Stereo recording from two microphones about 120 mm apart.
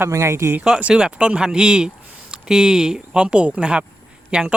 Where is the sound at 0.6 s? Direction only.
5° right (ahead or behind).